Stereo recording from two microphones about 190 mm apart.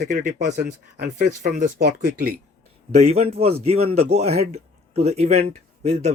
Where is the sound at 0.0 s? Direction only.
40° right (ahead or behind).